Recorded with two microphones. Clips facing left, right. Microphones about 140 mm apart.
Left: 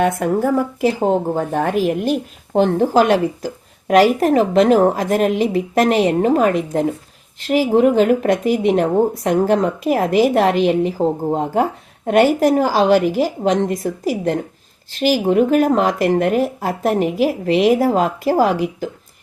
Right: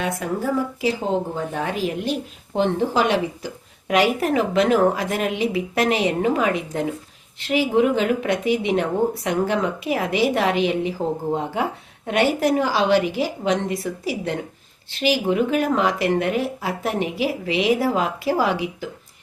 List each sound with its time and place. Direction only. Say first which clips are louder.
0.0 s speech: left 8 dB; 50° left (ahead or behind)